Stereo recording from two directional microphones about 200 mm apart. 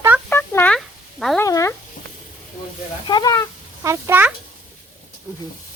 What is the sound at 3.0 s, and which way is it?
Speech, 20° left (ahead or behind).